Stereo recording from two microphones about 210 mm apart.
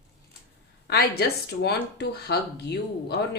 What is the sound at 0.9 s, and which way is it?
Speech, 50° left (ahead or behind).